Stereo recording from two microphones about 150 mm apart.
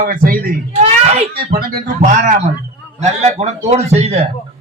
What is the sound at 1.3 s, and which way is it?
Speech, 90° right.